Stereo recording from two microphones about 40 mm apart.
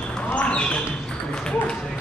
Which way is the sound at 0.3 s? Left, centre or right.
Left.